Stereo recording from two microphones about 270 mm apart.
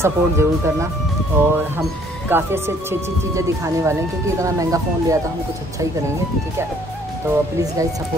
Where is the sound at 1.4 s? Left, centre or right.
Centre.